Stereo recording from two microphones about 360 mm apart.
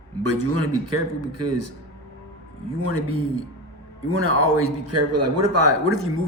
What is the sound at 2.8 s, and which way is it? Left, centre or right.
A man's voice, right.